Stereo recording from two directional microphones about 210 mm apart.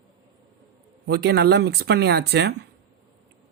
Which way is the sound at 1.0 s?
50° right (ahead or behind).